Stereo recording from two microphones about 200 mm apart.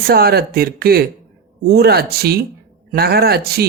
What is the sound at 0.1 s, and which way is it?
Speech, 50° right (ahead or behind).